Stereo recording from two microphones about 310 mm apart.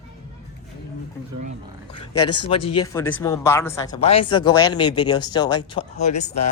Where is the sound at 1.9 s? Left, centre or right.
Centre.